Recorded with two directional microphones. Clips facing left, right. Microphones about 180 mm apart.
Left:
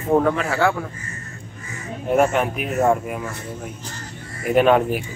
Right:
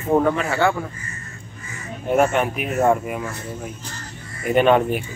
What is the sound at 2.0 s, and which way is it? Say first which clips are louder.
Speech: even; centre (ahead or behind).